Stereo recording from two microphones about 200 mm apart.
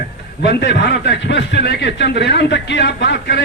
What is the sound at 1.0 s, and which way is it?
Speech, 60° left (ahead or behind).